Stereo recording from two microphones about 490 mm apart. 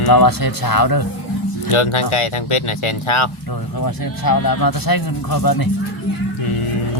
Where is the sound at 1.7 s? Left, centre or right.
Left.